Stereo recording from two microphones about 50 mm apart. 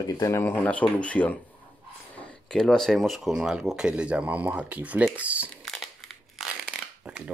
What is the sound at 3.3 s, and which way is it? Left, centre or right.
Speech, centre.